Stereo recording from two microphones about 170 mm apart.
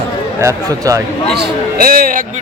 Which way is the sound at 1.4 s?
60° right (ahead or behind).